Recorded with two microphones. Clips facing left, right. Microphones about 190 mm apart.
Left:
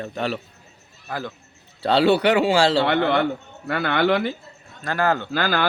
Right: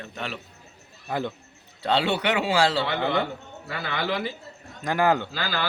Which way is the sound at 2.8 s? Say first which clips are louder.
Left 6 dB; 60° left (ahead or behind).